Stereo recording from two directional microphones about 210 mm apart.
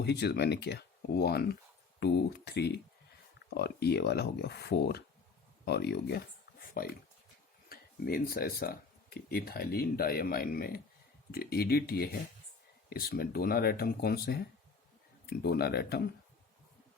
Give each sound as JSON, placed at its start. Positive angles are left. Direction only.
{"t": 0.0, "sound": "speech", "side_deg": 50}